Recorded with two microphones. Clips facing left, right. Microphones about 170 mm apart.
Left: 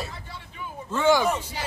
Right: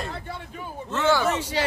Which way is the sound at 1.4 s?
75° right (ahead or behind).